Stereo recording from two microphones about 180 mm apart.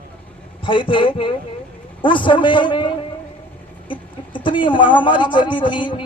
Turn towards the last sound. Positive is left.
turn(degrees=25)  # may be behind; listen again after turning